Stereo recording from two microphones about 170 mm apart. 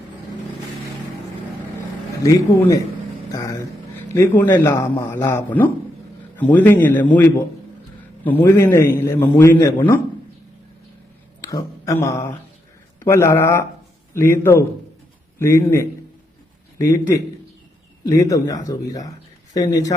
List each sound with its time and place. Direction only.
2.2 s a man's voice: 20° left (ahead or behind)
3.3 s a sound: 20° left (ahead or behind)
4.1 s a man's voice: 15° left (ahead or behind)
11.3 s a man's voice: 20° left (ahead or behind)